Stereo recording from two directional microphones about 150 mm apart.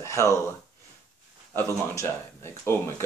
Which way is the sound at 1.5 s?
15° left (ahead or behind).